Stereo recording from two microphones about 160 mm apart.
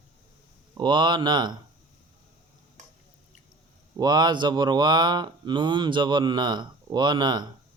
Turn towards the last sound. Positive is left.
turn(degrees=-25)  # may be behind; listen again after turning